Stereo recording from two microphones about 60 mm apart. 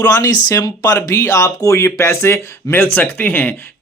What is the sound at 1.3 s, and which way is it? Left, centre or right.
Speech, left.